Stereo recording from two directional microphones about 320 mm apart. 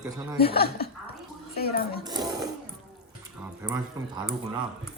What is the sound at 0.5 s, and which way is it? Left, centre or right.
Speech, left.